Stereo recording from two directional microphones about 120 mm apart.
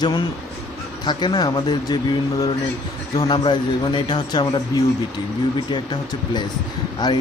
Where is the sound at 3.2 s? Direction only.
35° left (ahead or behind).